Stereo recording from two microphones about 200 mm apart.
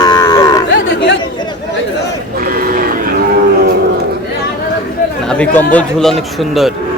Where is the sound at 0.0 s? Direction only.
20° left (ahead or behind).